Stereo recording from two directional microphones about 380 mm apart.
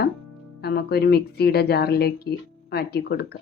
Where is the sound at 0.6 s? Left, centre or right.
Left.